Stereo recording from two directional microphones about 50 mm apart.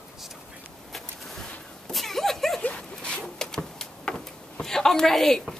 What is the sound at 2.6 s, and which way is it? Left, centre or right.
Dog, centre.